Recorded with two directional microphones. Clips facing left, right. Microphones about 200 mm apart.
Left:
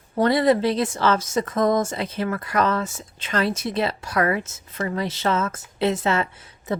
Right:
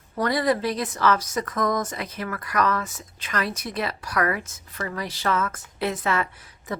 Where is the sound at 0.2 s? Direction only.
25° left (ahead or behind).